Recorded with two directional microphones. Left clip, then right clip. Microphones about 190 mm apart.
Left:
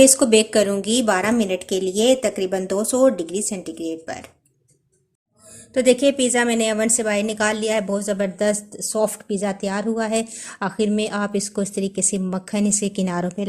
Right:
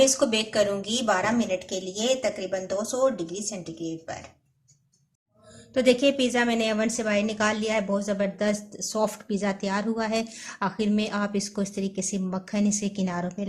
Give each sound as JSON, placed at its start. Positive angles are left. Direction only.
{"t": 0.0, "sound": "a woman's voice", "side_deg": 50}
{"t": 5.7, "sound": "a woman's voice", "side_deg": 25}